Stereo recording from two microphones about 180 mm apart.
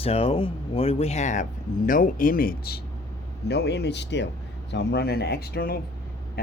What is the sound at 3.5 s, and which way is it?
Speech, 70° left (ahead or behind).